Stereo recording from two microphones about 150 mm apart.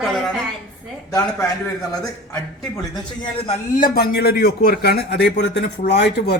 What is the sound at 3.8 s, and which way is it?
Speech, 90° left.